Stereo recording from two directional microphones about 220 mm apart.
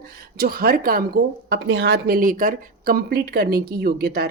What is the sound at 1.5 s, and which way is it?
Speech, 55° right (ahead or behind).